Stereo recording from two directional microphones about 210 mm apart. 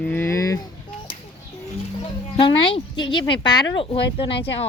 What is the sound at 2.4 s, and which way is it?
Speech, 25° left (ahead or behind).